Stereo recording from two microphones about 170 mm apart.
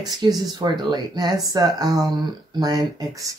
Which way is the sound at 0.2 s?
25° right (ahead or behind).